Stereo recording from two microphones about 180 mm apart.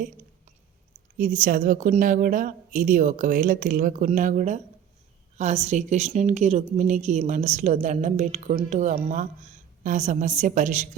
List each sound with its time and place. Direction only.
1.2 s a woman's voice: 50° right (ahead or behind)